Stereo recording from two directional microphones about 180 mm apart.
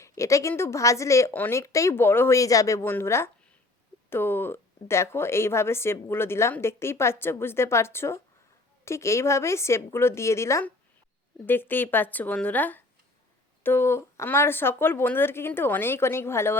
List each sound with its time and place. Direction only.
0.0 s a woman's voice: 15° left (ahead or behind)